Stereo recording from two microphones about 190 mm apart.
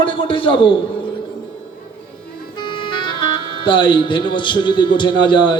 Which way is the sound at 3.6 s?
25° left (ahead or behind).